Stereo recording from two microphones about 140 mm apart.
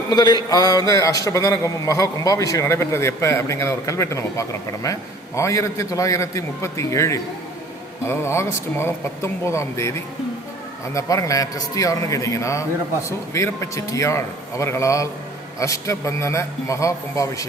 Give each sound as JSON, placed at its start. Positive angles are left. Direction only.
{"t": 0.1, "sound": "a man's voice", "side_deg": 30}
{"t": 10.9, "sound": "a man's voice", "side_deg": 25}